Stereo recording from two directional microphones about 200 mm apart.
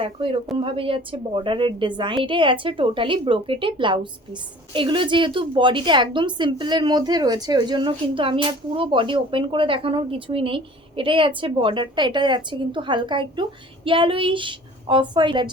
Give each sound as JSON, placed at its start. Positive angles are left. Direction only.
{"t": 0.0, "sound": "a woman's voice", "side_deg": -25}